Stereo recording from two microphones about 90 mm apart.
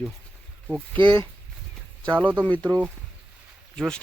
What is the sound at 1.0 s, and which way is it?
Speech, 70° right (ahead or behind).